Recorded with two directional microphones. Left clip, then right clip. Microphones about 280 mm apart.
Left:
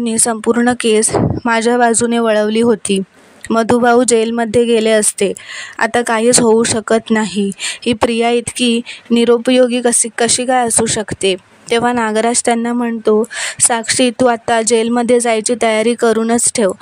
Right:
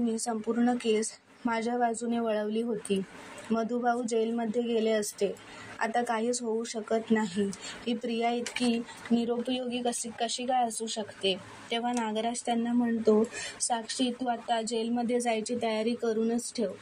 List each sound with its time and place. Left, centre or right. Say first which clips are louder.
0.0 s speech: left 16 dB; left
11.8 s speech: left 16 dB; left